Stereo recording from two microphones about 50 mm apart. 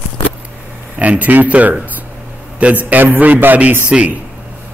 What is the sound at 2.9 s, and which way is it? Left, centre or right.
Speech, right.